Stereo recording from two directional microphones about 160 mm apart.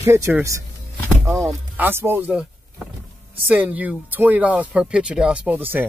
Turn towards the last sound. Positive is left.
turn(degrees=-10)  # may be behind; listen again after turning